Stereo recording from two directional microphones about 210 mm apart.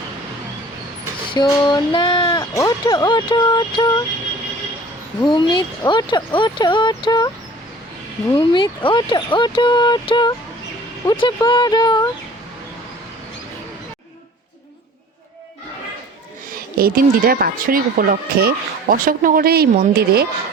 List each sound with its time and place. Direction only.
1.3 s female singing: 20° left (ahead or behind)
2.6 s speech: 15° left (ahead or behind)
5.2 s speech: 20° left (ahead or behind)
8.3 s speech: 20° left (ahead or behind)
16.5 s speech: 45° right (ahead or behind)